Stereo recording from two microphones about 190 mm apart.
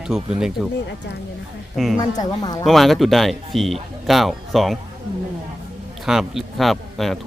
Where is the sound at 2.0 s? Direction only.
20° left (ahead or behind).